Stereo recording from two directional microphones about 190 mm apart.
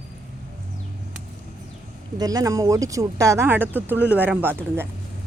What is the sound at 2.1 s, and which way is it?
Speech, 20° right (ahead or behind).